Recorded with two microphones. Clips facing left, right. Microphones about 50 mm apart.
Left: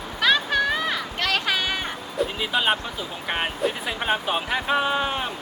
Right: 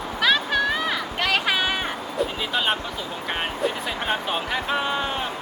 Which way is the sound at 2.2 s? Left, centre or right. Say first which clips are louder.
Left 1 dB; centre.